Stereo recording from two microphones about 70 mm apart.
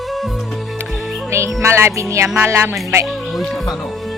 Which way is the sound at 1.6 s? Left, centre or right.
Right.